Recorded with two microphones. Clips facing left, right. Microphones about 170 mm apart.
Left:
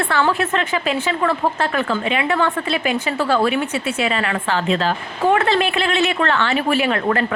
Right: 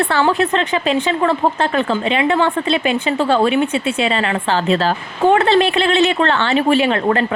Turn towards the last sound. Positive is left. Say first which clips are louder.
# right 3 dB
turn(degrees=-25)  # may be behind; listen again after turning